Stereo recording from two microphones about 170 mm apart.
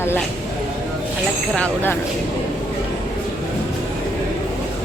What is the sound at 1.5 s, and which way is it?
Speech, 10° left (ahead or behind).